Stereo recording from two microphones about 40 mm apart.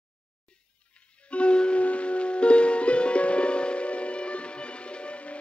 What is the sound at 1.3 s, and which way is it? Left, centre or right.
Music, left.